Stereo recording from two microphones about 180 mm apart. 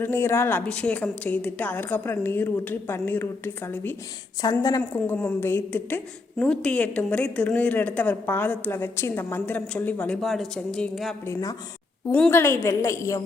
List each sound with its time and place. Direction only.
0.0 s a woman's voice: 15° left (ahead or behind)
4.4 s a woman's voice: 20° left (ahead or behind)
4.8 s a woman's voice: 10° left (ahead or behind)
11.3 s a woman's voice: 20° left (ahead or behind)